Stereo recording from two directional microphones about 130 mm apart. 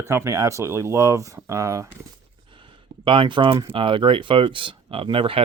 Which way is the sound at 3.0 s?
40° right (ahead or behind).